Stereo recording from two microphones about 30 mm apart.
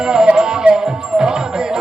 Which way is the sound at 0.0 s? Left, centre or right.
Right.